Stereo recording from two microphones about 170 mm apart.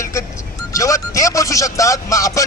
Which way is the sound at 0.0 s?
20° left (ahead or behind).